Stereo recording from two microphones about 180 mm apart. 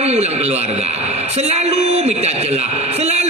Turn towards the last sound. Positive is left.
turn(degrees=-35)  # may be behind; listen again after turning